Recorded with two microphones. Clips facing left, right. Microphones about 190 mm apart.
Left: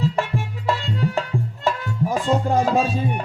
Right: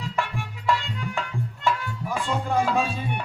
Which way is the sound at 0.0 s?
35° left (ahead or behind).